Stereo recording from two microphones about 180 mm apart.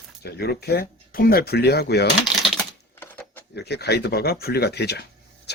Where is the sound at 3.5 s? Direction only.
65° left (ahead or behind).